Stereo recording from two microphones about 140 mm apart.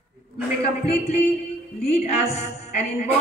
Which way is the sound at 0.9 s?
45° left (ahead or behind).